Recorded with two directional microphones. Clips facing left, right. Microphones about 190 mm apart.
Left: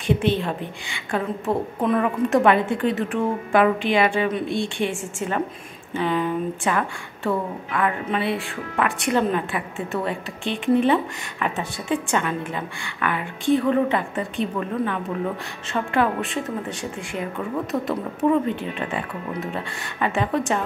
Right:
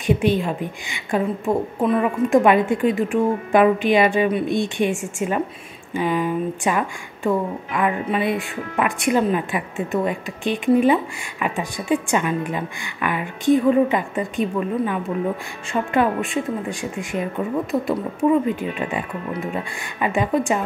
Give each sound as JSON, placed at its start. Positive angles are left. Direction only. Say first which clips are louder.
{"t": 0.0, "sound": "a woman's voice", "louder": "right 2 dB", "side_deg": -15}
{"t": 15.7, "sound": "a woman's voice", "louder": "right 2 dB", "side_deg": -15}